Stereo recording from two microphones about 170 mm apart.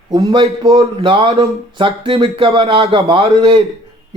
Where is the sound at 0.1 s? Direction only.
25° right (ahead or behind).